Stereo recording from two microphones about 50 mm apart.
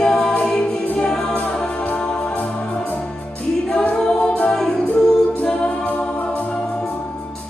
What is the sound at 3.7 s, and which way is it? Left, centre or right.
Choir, left.